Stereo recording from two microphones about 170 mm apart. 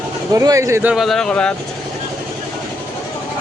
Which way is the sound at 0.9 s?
Centre (ahead or behind).